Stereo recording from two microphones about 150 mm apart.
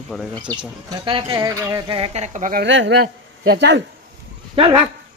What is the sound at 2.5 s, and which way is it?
Speech, 90° right.